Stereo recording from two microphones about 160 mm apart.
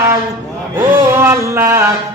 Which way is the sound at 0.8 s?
15° right (ahead or behind).